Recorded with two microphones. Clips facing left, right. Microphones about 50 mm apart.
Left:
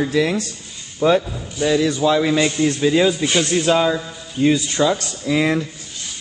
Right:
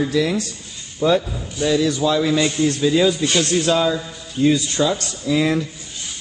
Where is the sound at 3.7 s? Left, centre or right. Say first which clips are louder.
Left 1 dB; left.